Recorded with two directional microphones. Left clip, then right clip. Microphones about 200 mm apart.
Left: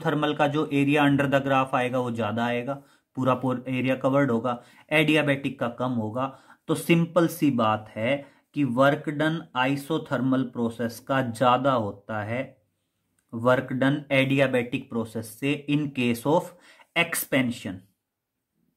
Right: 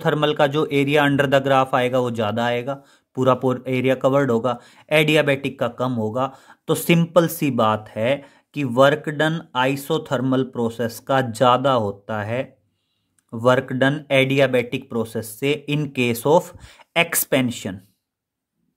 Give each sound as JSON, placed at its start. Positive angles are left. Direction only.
{"t": 0.0, "sound": "speech", "side_deg": -40}